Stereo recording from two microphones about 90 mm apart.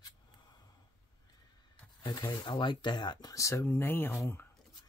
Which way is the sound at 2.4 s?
60° left (ahead or behind).